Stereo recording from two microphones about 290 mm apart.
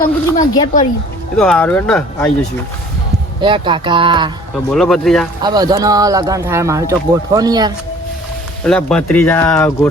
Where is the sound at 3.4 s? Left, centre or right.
Centre.